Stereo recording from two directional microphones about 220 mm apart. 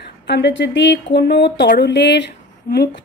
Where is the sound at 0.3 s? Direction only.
55° left (ahead or behind).